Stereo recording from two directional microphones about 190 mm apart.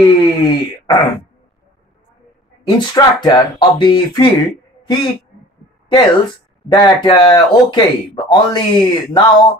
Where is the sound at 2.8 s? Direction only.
20° left (ahead or behind).